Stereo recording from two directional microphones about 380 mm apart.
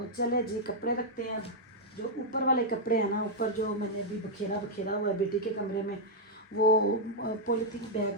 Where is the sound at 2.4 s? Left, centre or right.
Left.